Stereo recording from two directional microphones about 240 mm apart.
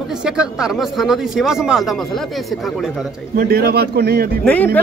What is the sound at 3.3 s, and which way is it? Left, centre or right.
Speech, right.